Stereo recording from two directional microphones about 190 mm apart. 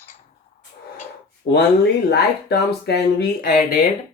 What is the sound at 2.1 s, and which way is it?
Speech, 60° left (ahead or behind).